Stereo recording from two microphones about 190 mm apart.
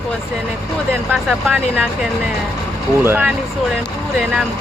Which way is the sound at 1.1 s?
5° right (ahead or behind).